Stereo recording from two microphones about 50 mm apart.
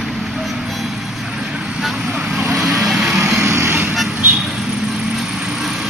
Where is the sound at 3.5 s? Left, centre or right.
Right.